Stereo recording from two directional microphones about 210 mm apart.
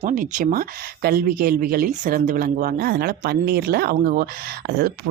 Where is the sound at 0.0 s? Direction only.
35° right (ahead or behind).